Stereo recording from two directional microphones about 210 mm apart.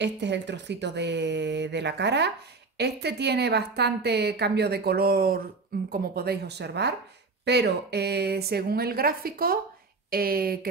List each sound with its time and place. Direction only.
0.0 s a woman's voice: 55° right (ahead or behind)